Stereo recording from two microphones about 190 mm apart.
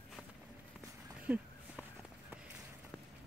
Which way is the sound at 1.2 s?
10° right (ahead or behind).